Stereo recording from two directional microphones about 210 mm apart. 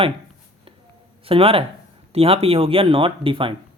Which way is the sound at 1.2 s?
25° right (ahead or behind).